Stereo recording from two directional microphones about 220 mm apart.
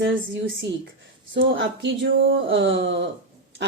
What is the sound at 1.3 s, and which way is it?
Speech, 55° right (ahead or behind).